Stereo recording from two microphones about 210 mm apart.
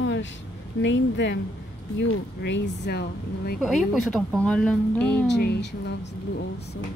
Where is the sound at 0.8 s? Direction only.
60° left (ahead or behind).